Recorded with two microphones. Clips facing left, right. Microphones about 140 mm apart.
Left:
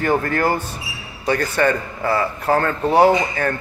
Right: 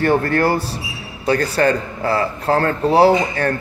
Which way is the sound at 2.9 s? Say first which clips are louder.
Right 1 dB; 35° right (ahead or behind).